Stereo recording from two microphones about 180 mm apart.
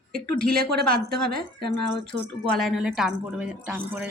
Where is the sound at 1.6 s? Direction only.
65° right (ahead or behind).